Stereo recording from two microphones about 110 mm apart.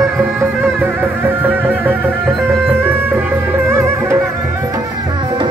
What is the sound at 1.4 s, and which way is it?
Music, 15° right (ahead or behind).